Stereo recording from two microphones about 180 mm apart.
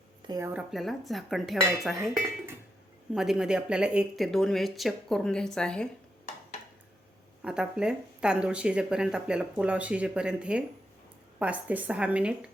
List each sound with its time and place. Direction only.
0.3 s speech: 20° right (ahead or behind)
0.5 s speech: centre (ahead or behind)
7.4 s speech: 5° right (ahead or behind)